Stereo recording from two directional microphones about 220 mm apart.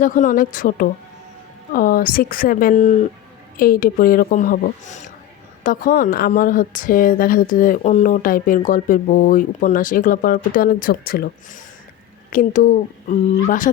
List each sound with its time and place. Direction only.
0.0 s a woman's voice: 35° left (ahead or behind)